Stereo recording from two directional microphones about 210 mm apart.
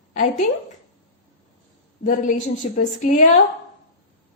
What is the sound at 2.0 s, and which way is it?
A woman's voice, 35° left (ahead or behind).